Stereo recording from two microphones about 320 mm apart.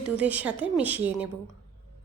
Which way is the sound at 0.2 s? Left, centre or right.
Centre.